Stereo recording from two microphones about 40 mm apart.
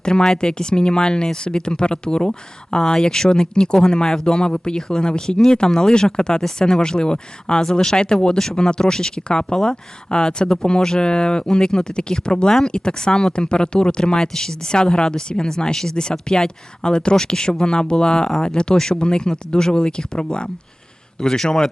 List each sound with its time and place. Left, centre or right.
0.0 s speech: centre